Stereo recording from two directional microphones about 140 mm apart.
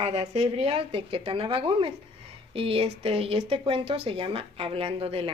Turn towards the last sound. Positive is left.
turn(degrees=-45)  # may be behind; listen again after turning